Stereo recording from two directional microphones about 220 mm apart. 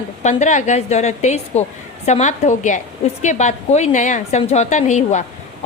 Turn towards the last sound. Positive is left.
turn(degrees=35)  # may be behind; listen again after turning